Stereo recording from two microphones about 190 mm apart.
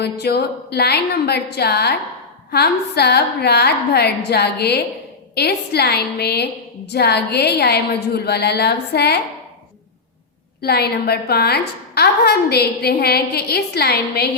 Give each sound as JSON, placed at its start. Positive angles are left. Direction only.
{"t": 0.0, "sound": "a woman's voice", "side_deg": 60}
{"t": 10.6, "sound": "a woman's voice", "side_deg": 55}